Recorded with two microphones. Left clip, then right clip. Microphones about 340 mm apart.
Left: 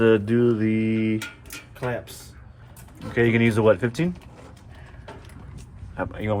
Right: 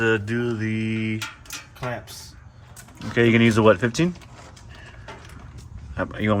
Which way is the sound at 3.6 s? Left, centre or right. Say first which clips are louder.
Right 1 dB; right.